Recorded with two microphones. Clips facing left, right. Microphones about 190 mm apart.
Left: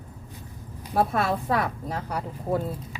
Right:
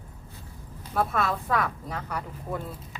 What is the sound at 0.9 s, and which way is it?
Speech, 35° left (ahead or behind).